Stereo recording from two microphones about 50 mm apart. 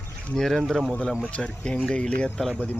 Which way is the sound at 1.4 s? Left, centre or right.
Left.